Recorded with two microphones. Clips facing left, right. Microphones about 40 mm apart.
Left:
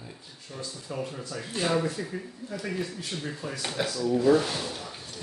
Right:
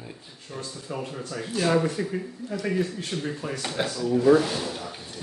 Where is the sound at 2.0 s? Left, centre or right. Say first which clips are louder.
Right 6 dB; right.